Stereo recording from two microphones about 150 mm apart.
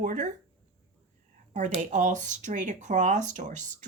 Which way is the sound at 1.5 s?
55° right (ahead or behind).